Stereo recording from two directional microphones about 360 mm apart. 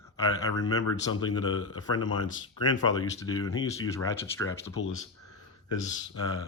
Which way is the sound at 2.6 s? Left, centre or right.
Left.